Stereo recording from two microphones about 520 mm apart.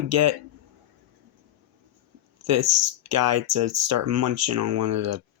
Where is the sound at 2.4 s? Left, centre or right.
Right.